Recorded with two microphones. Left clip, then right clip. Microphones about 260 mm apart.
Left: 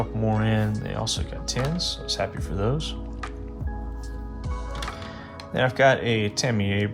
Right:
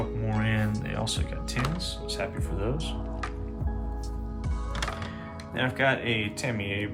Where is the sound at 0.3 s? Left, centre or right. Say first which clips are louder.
Left 5 dB; centre.